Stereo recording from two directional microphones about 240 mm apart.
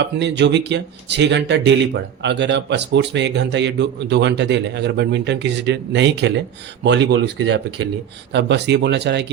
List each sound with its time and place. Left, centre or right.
0.0 s speech: right